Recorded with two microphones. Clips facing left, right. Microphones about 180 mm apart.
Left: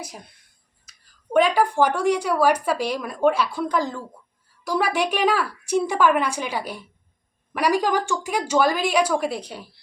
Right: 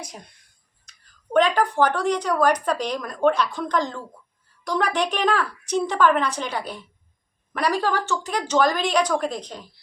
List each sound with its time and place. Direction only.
0.0 s speech: 5° left (ahead or behind)